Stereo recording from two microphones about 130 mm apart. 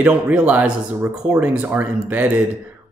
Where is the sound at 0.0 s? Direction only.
10° right (ahead or behind).